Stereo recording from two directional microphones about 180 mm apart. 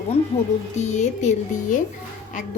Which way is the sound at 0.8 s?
40° left (ahead or behind).